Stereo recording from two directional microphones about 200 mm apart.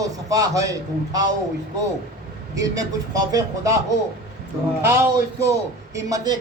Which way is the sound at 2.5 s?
15° right (ahead or behind).